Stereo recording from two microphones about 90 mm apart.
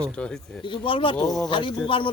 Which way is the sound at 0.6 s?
70° left (ahead or behind).